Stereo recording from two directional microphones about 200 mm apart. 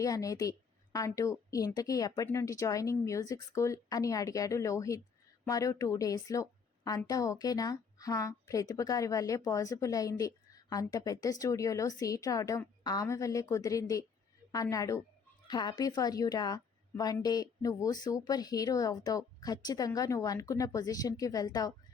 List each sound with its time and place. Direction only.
0.0 s a woman's voice: 15° left (ahead or behind)